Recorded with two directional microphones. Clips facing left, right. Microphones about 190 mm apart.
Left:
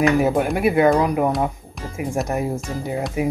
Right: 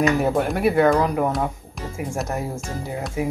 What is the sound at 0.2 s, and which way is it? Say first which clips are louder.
Speech: left 2 dB; 10° left (ahead or behind).